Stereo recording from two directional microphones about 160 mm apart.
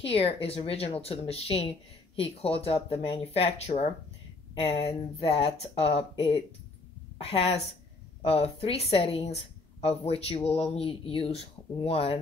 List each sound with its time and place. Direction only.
0.0 s a woman's voice: 35° left (ahead or behind)